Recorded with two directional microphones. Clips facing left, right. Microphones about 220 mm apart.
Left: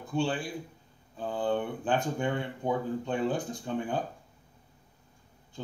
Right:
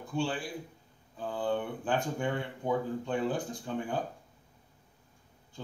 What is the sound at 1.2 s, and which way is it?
Speech, 25° left (ahead or behind).